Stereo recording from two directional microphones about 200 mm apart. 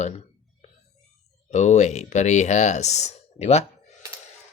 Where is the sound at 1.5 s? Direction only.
35° left (ahead or behind).